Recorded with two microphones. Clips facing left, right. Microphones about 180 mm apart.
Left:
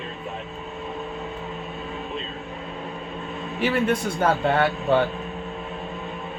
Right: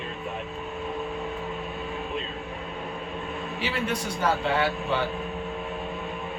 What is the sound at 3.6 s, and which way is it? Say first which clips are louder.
A man's voice: left 8 dB; 50° left (ahead or behind).